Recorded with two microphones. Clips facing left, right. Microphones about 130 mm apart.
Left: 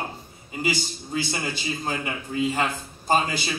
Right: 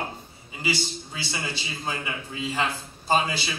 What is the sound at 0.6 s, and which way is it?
A man's voice, 45° left (ahead or behind).